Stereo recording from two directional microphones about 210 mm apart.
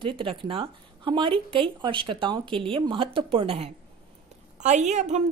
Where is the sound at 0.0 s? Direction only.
25° right (ahead or behind).